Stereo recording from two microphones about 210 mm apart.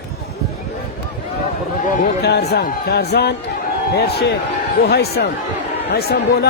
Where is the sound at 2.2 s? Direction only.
50° left (ahead or behind).